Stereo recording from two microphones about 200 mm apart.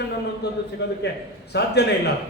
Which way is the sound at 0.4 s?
55° left (ahead or behind).